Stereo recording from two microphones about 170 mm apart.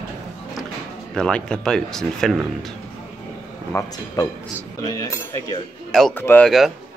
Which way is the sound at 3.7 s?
25° left (ahead or behind).